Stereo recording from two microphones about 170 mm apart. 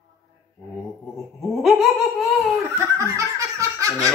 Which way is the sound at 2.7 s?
20° right (ahead or behind).